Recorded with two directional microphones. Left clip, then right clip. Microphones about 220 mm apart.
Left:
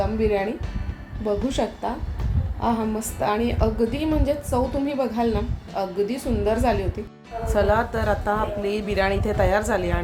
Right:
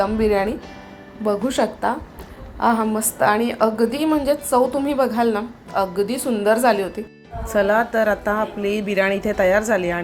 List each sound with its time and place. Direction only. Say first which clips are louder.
0.0 s a woman's voice: right 4 dB; 15° right (ahead or behind)